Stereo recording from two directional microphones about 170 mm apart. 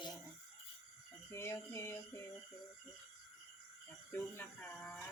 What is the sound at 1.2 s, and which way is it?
Speech, 15° left (ahead or behind).